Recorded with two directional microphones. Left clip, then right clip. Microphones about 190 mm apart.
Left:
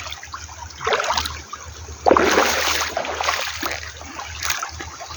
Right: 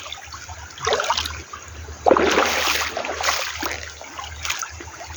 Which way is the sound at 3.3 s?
5° left (ahead or behind).